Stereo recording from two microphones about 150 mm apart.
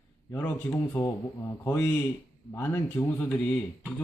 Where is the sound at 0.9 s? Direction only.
15° left (ahead or behind).